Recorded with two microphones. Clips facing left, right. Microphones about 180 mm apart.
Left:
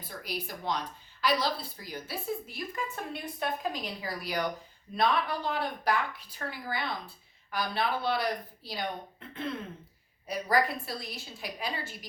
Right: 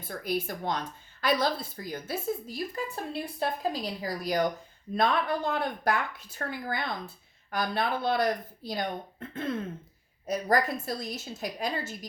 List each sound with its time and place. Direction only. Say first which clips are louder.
0.0 s a woman's voice: right 7 dB; 50° right (ahead or behind)
10.2 s a woman's voice: right 2 dB; 45° right (ahead or behind)